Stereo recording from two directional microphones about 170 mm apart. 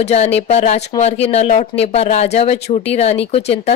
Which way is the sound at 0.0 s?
40° left (ahead or behind).